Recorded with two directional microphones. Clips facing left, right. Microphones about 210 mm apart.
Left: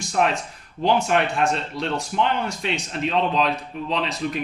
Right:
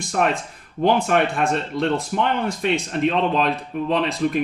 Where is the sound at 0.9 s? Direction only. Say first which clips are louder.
Right 2 dB; 55° right (ahead or behind).